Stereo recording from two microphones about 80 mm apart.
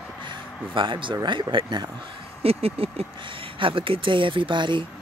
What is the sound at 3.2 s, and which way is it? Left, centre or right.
Speech, right.